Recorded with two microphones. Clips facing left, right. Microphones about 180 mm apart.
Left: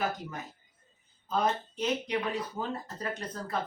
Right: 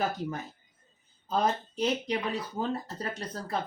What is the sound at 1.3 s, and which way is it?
Speech, 35° right (ahead or behind).